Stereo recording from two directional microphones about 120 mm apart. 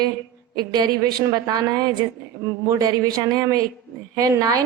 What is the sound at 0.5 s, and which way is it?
Speech, 35° right (ahead or behind).